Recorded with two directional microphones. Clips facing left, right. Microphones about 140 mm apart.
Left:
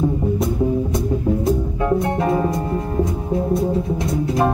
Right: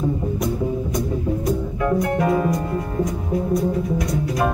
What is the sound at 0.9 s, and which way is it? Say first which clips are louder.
Music: left 3 dB; 25° left (ahead or behind).